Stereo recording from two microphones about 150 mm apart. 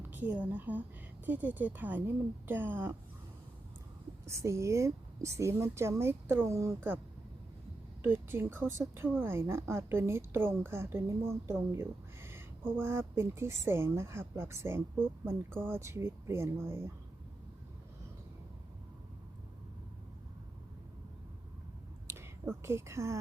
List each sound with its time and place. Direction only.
0.1 s a woman's voice: 10° right (ahead or behind)
4.3 s speech: 20° right (ahead or behind)
8.0 s a woman's voice: 15° right (ahead or behind)
22.6 s a woman's voice: 20° right (ahead or behind)